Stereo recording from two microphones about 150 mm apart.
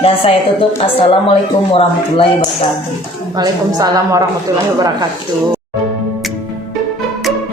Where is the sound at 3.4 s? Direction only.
25° right (ahead or behind).